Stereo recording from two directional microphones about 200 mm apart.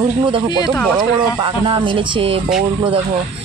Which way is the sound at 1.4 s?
25° right (ahead or behind).